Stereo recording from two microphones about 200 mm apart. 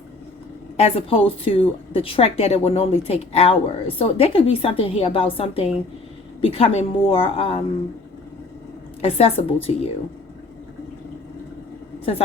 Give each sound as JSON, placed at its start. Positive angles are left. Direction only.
{"t": 0.8, "sound": "a woman's voice", "side_deg": 30}
{"t": 9.0, "sound": "a woman's voice", "side_deg": 30}